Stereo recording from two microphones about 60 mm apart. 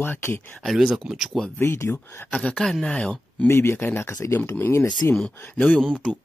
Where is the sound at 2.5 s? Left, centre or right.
Centre.